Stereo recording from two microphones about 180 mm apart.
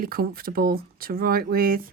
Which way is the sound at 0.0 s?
55° right (ahead or behind).